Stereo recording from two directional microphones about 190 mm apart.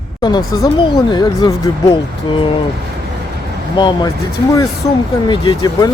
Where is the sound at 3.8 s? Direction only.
25° left (ahead or behind).